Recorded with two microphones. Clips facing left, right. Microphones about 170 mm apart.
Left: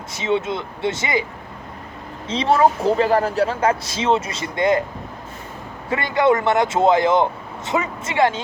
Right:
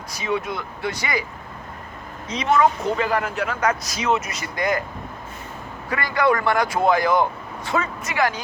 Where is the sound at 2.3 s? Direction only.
30° left (ahead or behind).